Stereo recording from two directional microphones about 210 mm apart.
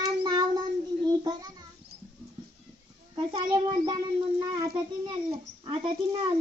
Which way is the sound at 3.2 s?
25° right (ahead or behind).